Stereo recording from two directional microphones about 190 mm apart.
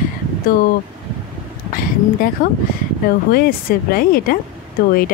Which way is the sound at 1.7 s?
50° left (ahead or behind).